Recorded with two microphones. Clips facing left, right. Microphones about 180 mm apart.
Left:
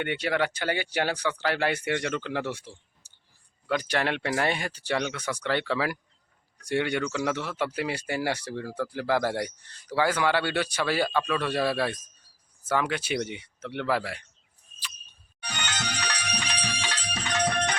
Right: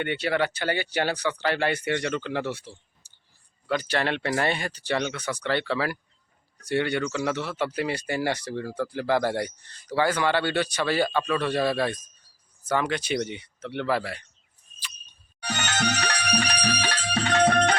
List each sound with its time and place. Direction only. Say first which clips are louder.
0.0 s speech: right 2 dB; 10° left (ahead or behind)
3.0 s clicking: left 1 dB; 10° left (ahead or behind)
3.7 s speech: right 1 dB; 10° left (ahead or behind)
15.4 s music: right 7 dB; 45° right (ahead or behind)
17.2 s music: right 7 dB; 65° right (ahead or behind)